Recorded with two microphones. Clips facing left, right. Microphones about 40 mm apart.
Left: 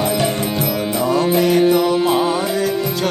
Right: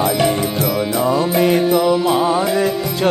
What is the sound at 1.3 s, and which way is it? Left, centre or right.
Music, centre.